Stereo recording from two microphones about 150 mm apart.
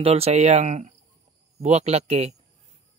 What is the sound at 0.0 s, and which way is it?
Speech, 40° right (ahead or behind).